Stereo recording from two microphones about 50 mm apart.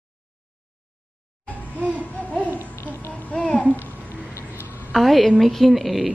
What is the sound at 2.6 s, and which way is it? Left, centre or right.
Babbling, left.